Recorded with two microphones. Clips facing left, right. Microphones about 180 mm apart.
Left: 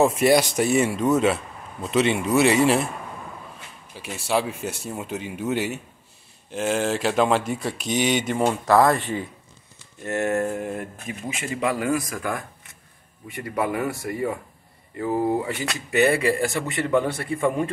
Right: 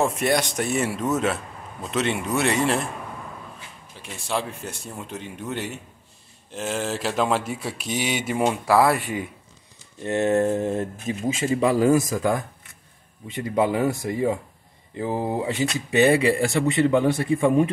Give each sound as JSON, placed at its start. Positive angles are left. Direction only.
{"t": 0.0, "sound": "speech", "side_deg": 5}
{"t": 3.9, "sound": "speech", "side_deg": 5}